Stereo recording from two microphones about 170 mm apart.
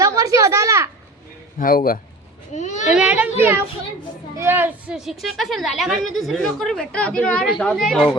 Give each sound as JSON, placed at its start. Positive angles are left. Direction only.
{"t": 0.0, "sound": "a sound", "side_deg": -20}
{"t": 1.5, "sound": "a man's voice", "side_deg": 55}
{"t": 2.5, "sound": "a child's voice", "side_deg": 45}
{"t": 2.9, "sound": "a child's voice", "side_deg": -5}